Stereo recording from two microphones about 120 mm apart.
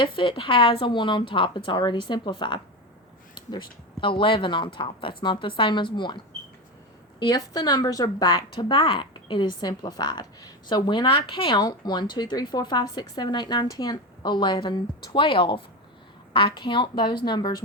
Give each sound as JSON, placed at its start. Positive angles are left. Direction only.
{"t": 0.0, "sound": "a woman's voice", "side_deg": 45}